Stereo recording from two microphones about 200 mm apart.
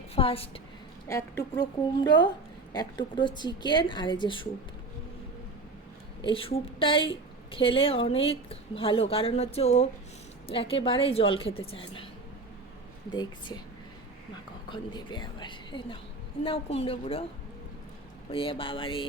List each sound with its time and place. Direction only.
0.2 s speech: 25° left (ahead or behind)
1.0 s speech: 15° left (ahead or behind)
6.2 s speech: 25° left (ahead or behind)
13.1 s speech: 20° left (ahead or behind)
14.7 s speech: 20° left (ahead or behind)
18.3 s speech: 25° left (ahead or behind)